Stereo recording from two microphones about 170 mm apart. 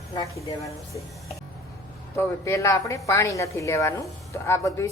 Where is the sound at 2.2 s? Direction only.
15° left (ahead or behind).